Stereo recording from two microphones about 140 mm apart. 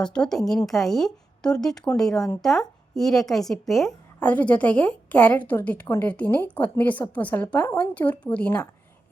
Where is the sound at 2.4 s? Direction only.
Centre (ahead or behind).